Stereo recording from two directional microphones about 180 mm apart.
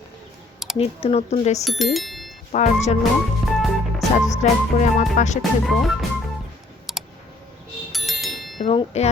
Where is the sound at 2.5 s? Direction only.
40° left (ahead or behind).